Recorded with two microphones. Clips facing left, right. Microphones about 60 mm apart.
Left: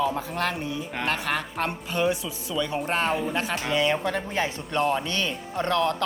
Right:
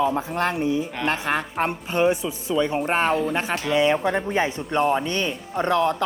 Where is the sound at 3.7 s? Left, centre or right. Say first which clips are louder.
Right 5 dB; centre.